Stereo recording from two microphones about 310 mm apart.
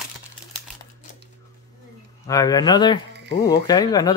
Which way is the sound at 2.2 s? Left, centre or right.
Centre.